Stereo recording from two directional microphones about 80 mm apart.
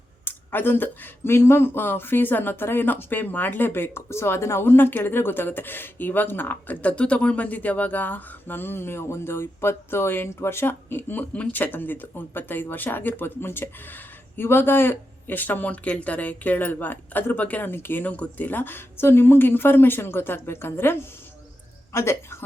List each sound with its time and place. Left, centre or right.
0.3 s a woman's voice: left